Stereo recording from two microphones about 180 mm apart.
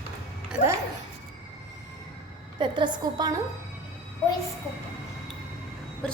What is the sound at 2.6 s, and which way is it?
Speech, 25° right (ahead or behind).